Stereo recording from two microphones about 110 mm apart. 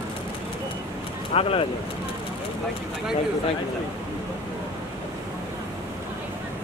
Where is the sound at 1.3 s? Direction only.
55° left (ahead or behind).